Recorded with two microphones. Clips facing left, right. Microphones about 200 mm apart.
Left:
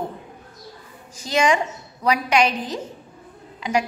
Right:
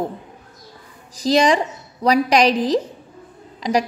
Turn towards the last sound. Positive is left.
turn(degrees=-35)  # may be behind; listen again after turning